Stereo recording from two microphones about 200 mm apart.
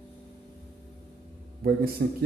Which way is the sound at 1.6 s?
50° right (ahead or behind).